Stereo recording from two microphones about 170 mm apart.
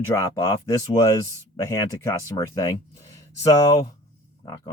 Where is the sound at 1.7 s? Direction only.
20° left (ahead or behind).